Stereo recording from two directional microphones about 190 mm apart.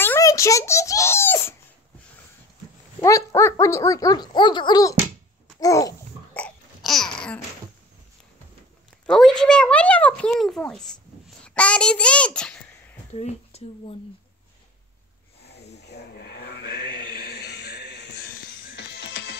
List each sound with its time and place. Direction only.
0.0 s a sound: 15° left (ahead or behind)
3.0 s speech: 15° left (ahead or behind)
5.6 s babbling: 15° left (ahead or behind)
6.4 s babbling: centre (ahead or behind)
9.0 s speech: 5° left (ahead or behind)
13.1 s speech: 35° left (ahead or behind)
15.8 s a sound: 60° left (ahead or behind)
18.8 s music: 60° left (ahead or behind)